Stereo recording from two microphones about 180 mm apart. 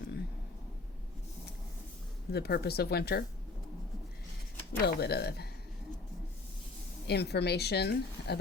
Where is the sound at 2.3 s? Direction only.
60° left (ahead or behind).